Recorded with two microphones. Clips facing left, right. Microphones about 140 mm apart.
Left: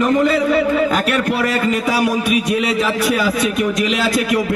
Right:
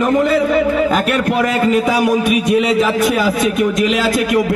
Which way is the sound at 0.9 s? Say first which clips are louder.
Right 2 dB; 50° right (ahead or behind).